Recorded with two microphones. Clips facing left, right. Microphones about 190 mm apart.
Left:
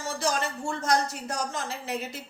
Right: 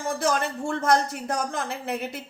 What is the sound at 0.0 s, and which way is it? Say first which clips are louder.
Speech: right 4 dB; 55° right (ahead or behind).